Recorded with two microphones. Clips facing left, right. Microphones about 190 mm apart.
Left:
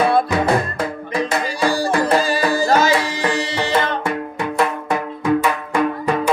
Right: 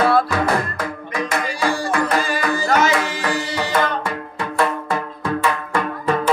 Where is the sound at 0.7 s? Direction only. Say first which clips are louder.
Left 3 dB; 30° left (ahead or behind).